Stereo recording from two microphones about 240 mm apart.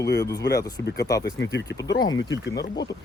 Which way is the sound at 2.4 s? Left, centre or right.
Left.